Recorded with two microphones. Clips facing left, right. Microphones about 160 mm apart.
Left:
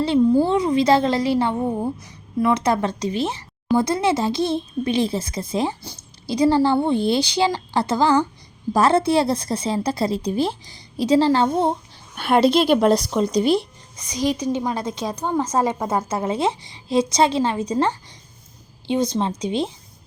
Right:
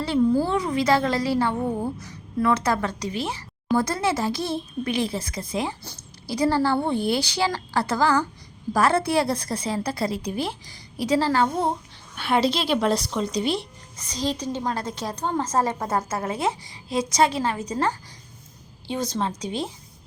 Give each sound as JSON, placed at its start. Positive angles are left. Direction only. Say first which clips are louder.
{"t": 0.0, "sound": "a woman's voice", "louder": "left 4 dB", "side_deg": 25}
{"t": 12.1, "sound": "speech", "louder": "left 6 dB", "side_deg": 50}
{"t": 13.9, "sound": "a woman's voice", "louder": "left 5 dB", "side_deg": 15}